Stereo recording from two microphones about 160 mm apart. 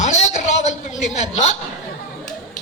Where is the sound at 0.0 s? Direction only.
45° left (ahead or behind).